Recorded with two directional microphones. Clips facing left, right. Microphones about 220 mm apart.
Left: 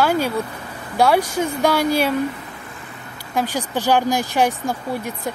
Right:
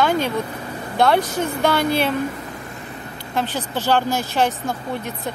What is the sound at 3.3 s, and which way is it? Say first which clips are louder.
Speech: left 2 dB; 10° left (ahead or behind).